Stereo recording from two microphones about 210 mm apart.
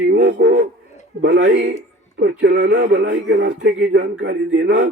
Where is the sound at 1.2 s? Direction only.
55° right (ahead or behind).